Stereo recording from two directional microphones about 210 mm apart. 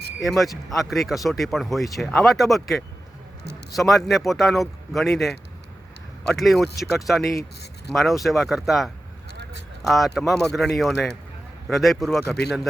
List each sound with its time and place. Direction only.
0.2 s speech: centre (ahead or behind)